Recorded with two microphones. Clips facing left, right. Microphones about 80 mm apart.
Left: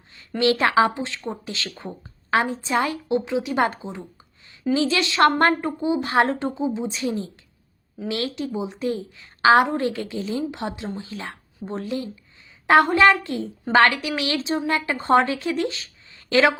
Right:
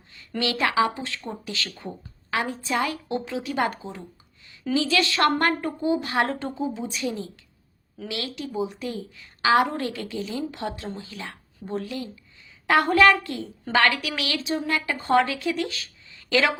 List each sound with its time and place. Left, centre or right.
0.1 s a woman's voice: left